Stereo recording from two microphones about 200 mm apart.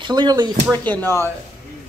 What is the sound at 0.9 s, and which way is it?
Speech, 10° left (ahead or behind).